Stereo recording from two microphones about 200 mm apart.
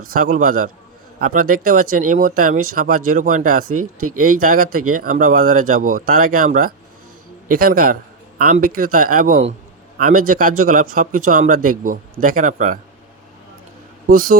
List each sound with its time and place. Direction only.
0.0 s speech: 45° right (ahead or behind)
3.7 s speech: 90° right
4.4 s speech: 45° right (ahead or behind)
14.1 s speech: 40° right (ahead or behind)